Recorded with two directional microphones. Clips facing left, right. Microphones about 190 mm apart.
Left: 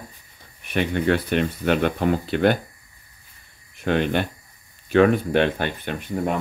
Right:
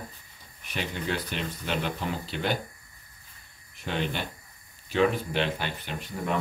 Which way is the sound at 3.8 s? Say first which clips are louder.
Left 9 dB; 55° left (ahead or behind).